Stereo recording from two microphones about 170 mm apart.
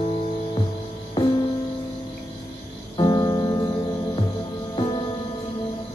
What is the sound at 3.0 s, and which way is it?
Music, 25° left (ahead or behind).